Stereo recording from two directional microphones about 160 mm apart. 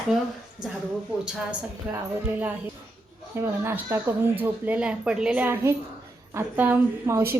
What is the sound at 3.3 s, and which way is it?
A woman's voice, 15° right (ahead or behind).